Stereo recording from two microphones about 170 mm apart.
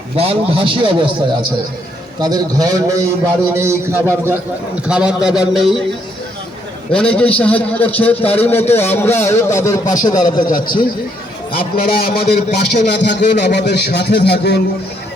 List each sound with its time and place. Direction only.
0.2 s a man's voice: 35° right (ahead or behind); by 5.8 s centre (ahead or behind)
6.9 s a man's voice: 5° left (ahead or behind)
8.2 s speech: 35° left (ahead or behind)
8.7 s a man's voice: 15° left (ahead or behind)
10.4 s a man's voice: 55° left (ahead or behind); by 14.6 s 70° left (ahead or behind)